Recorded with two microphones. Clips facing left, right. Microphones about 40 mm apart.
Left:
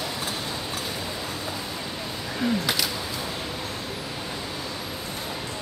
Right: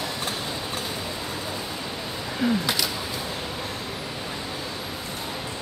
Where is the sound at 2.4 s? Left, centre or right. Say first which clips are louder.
Right 1 dB; centre.